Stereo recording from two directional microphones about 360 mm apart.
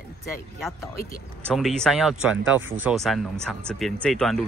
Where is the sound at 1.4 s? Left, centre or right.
Centre.